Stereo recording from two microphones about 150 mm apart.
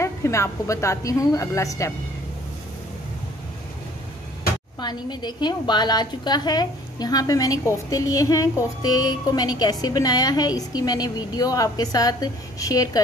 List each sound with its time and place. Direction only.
0.0 s a woman's voice: 20° left (ahead or behind)
4.7 s a woman's voice: 30° left (ahead or behind)